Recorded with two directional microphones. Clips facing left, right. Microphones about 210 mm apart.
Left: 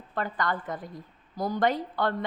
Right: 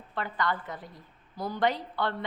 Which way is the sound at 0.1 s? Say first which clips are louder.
Left 1 dB; 45° left (ahead or behind).